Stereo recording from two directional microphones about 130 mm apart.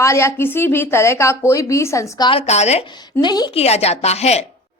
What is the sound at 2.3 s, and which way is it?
Speech, 55° left (ahead or behind).